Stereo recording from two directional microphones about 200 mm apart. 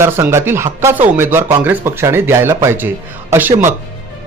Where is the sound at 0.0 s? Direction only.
15° right (ahead or behind).